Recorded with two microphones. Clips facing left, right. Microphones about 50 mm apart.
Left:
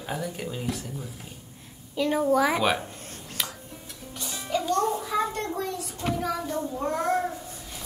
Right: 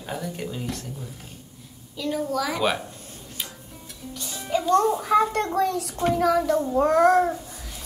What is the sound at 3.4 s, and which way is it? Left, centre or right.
Tick-tock, left.